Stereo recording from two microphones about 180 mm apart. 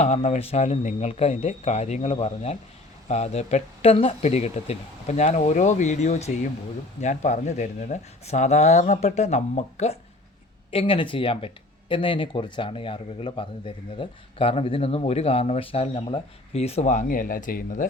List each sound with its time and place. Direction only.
0.0 s speech: 40° left (ahead or behind)